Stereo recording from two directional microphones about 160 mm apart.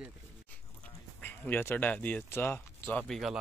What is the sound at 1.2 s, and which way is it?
Speech, 10° left (ahead or behind).